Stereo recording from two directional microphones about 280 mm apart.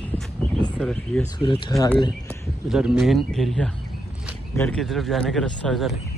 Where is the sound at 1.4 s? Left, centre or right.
Centre.